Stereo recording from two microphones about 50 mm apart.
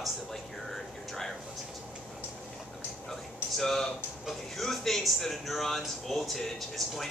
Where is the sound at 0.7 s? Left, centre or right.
Centre.